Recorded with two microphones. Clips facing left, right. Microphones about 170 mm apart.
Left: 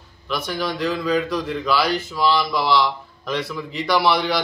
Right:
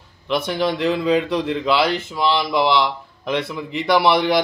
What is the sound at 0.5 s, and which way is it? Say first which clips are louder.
A man's voice: right 3 dB; 25° right (ahead or behind).